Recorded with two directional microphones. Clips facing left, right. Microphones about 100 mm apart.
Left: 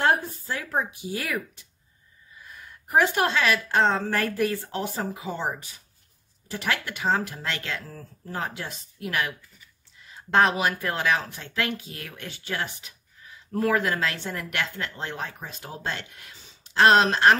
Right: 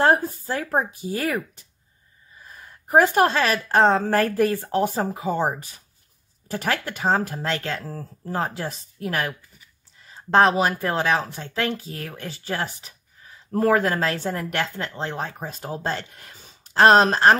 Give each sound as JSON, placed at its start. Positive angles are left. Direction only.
{"t": 0.0, "sound": "speech", "side_deg": -40}
{"t": 2.3, "sound": "a sound", "side_deg": -35}
{"t": 3.6, "sound": "speech", "side_deg": -45}